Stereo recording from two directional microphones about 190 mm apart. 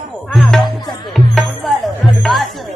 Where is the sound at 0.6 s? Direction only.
25° left (ahead or behind).